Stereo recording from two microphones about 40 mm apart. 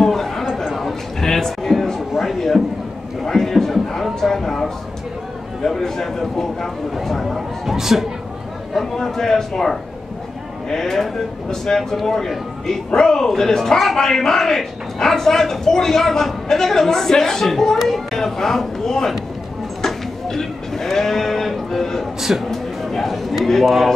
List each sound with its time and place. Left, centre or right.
0.0 s a sound: centre
5.6 s a man's voice: centre
7.0 s a sound: centre
8.7 s a man's voice: centre
19.8 s sheep: centre
22.5 s a man's voice: centre